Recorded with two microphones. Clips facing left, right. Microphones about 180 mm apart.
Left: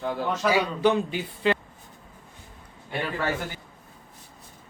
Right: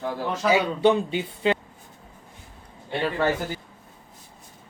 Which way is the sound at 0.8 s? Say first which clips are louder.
Right 2 dB; 25° right (ahead or behind).